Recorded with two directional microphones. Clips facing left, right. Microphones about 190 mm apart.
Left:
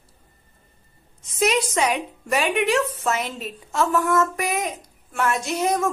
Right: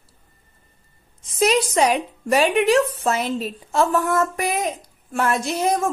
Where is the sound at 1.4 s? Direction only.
35° right (ahead or behind).